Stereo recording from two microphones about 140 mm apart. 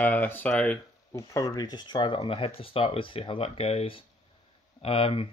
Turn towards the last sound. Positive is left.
turn(degrees=45)  # may be behind; listen again after turning